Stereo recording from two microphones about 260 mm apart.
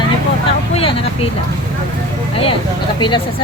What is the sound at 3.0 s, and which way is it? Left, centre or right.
Speech, centre.